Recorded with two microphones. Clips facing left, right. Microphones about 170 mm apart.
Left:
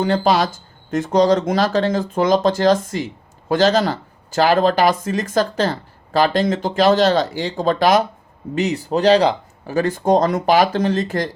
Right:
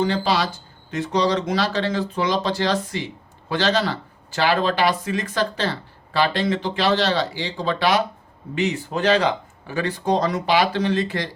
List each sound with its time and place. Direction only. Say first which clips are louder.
0.0 s speech: left 4 dB; 50° left (ahead or behind)